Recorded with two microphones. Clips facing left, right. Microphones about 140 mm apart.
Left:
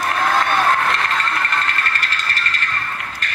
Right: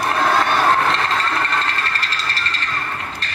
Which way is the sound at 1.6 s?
35° right (ahead or behind).